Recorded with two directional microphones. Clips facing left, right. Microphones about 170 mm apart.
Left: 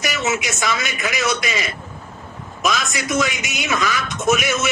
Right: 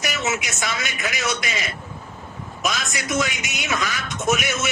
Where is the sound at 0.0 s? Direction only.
90° left.